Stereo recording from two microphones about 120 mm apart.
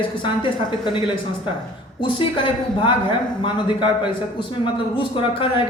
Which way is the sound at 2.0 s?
45° left (ahead or behind).